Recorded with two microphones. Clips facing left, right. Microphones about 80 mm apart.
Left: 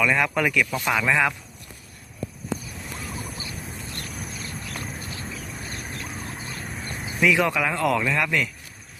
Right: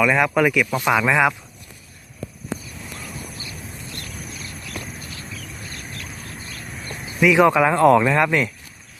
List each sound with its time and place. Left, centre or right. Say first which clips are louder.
0.0 s speech: right 5 dB; centre
4.4 s a sound: even; left
7.3 s speech: right 7 dB; right